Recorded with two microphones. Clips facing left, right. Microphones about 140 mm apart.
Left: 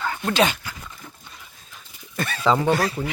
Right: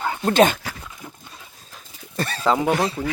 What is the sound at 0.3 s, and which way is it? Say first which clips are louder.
Speech: right 5 dB; 50° right (ahead or behind).